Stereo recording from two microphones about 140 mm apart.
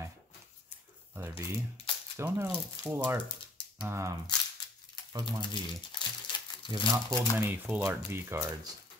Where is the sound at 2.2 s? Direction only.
20° right (ahead or behind).